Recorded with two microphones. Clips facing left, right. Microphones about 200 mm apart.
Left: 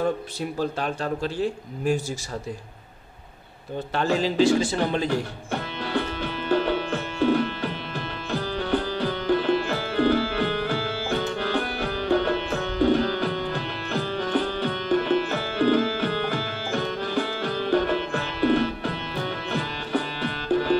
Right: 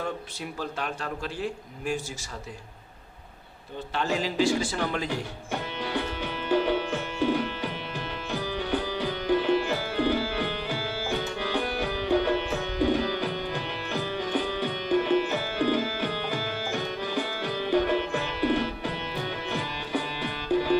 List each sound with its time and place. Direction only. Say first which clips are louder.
0.0 s a man's voice: left 7 dB; 35° left (ahead or behind)
4.2 s speech: left 6 dB; 20° left (ahead or behind)
5.5 s music: left 3 dB; 15° right (ahead or behind)